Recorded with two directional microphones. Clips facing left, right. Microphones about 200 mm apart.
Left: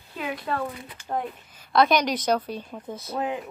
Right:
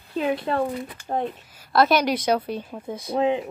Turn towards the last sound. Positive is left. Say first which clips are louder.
# right 7 dB
turn(degrees=-25)  # may be behind; listen again after turning